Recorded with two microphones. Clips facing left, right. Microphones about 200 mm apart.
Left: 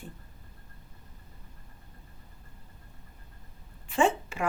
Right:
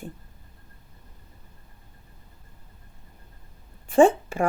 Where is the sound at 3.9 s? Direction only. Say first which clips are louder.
Right 9 dB; 50° right (ahead or behind).